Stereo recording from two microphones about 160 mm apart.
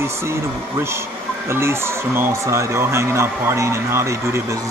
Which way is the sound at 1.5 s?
15° right (ahead or behind).